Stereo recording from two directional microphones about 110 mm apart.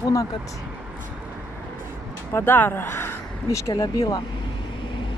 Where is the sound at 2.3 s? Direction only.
20° left (ahead or behind).